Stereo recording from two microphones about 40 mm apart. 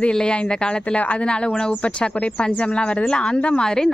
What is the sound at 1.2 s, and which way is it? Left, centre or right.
Speech, left.